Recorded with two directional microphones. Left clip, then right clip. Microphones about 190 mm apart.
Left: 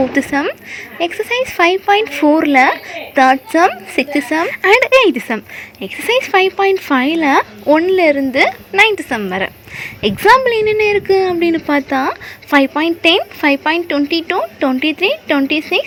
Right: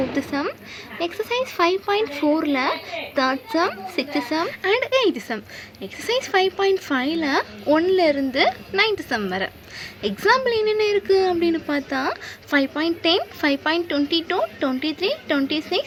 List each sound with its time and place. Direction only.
0.1 s a woman's voice: 25° left (ahead or behind)